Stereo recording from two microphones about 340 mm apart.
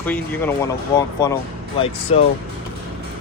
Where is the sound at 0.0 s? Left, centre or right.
Centre.